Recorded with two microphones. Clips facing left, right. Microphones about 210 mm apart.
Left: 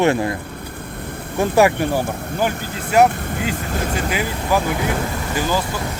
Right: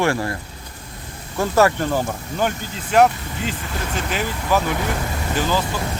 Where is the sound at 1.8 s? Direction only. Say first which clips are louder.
Left 2 dB; 10° left (ahead or behind).